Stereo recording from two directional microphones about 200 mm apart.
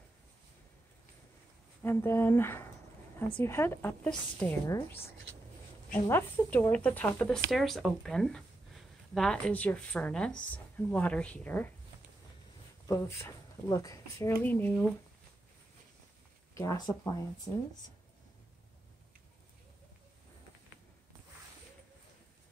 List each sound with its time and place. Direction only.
1.8 s speech: 10° left (ahead or behind)
12.8 s speech: 15° left (ahead or behind)
16.5 s speech: 20° left (ahead or behind)